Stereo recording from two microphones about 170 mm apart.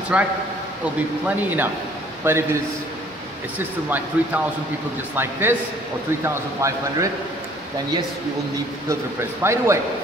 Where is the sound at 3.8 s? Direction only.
10° right (ahead or behind).